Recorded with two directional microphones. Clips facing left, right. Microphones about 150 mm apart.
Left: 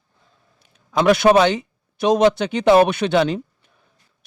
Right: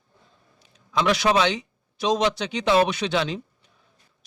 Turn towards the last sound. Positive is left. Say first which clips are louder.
# left 8 dB
turn(degrees=55)  # may be behind; listen again after turning